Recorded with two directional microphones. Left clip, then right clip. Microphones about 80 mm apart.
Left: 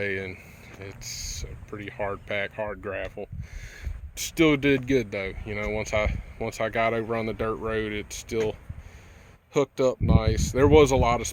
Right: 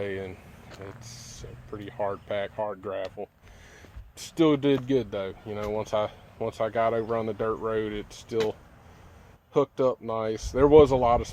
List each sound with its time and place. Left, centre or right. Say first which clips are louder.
0.0 s a sound: left 3 dB; left
0.8 s speech: left 7 dB; left
4.1 s speech: left 1 dB; left
5.8 s speech: left 1 dB; left